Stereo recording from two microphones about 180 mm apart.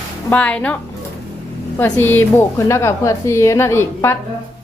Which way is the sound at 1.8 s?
10° left (ahead or behind).